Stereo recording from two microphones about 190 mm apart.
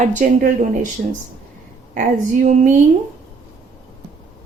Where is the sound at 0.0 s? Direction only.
40° right (ahead or behind).